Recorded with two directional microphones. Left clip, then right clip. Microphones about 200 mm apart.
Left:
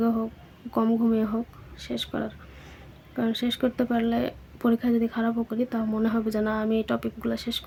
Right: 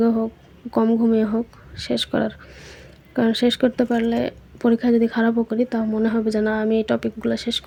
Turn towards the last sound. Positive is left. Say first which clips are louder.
# right 7 dB
turn(degrees=-15)  # may be behind; listen again after turning